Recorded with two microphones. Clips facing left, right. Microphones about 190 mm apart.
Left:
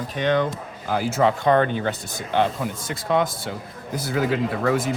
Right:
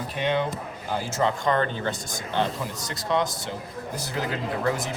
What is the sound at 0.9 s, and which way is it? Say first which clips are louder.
Speech: left 5 dB; 60° left (ahead or behind).